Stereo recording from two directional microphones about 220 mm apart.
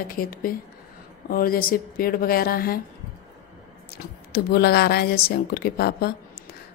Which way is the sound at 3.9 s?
45° left (ahead or behind).